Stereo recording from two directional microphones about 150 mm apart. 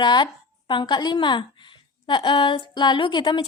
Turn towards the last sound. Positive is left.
turn(degrees=30)  # may be behind; listen again after turning